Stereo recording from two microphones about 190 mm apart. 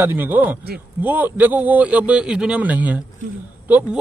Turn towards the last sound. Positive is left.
turn(degrees=-10)  # may be behind; listen again after turning